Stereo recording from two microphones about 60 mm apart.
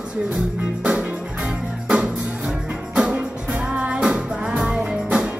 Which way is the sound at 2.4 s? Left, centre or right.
Centre.